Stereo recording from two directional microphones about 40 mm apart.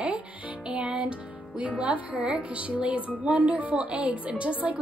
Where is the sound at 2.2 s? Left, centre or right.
Right.